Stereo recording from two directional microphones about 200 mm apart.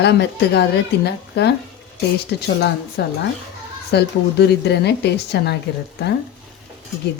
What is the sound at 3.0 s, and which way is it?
Speech, 55° left (ahead or behind).